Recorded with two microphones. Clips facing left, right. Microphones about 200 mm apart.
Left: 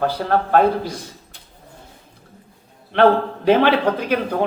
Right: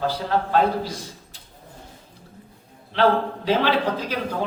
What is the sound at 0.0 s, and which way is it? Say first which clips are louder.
Speech: left 4 dB; 55° left (ahead or behind).